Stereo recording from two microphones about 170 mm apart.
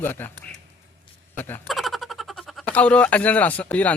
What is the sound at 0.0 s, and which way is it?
Speech, 10° left (ahead or behind).